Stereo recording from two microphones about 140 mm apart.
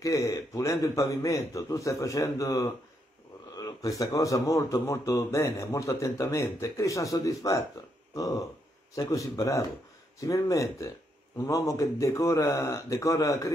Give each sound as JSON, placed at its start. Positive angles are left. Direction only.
{"t": 0.0, "sound": "a man's voice", "side_deg": 25}